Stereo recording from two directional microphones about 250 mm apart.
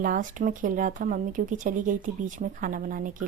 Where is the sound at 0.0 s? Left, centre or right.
Right.